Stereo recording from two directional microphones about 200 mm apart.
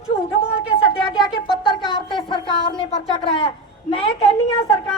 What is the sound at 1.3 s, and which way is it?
Speech, 25° left (ahead or behind).